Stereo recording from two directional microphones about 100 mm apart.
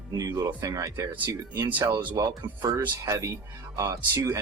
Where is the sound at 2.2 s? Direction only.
40° right (ahead or behind).